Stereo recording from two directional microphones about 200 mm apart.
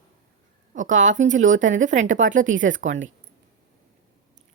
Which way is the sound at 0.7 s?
40° right (ahead or behind).